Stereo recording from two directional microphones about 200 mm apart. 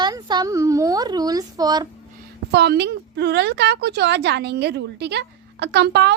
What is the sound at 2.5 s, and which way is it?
A woman's voice, 55° right (ahead or behind).